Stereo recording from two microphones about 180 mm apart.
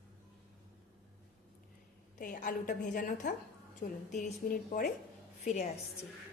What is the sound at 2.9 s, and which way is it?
Speech, 45° left (ahead or behind).